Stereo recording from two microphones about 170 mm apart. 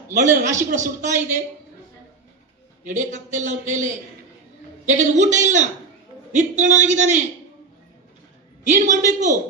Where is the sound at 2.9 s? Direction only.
45° right (ahead or behind).